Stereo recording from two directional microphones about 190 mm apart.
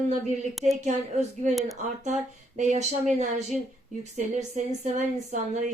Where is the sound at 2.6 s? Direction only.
40° right (ahead or behind).